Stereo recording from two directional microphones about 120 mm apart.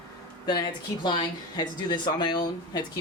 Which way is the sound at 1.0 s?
35° left (ahead or behind).